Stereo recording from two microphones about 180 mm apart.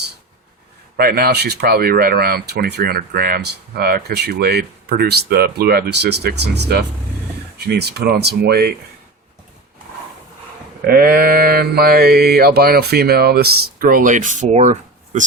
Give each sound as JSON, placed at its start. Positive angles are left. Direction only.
{"t": 0.9, "sound": "speech", "side_deg": -60}
{"t": 10.8, "sound": "speech", "side_deg": -55}